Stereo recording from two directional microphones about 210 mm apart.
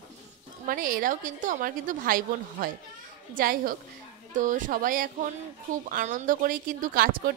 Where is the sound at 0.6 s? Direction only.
40° right (ahead or behind).